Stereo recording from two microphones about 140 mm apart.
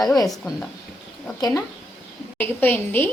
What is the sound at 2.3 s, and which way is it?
Speech, 15° left (ahead or behind).